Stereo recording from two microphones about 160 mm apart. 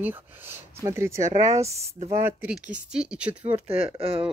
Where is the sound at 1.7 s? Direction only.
40° right (ahead or behind).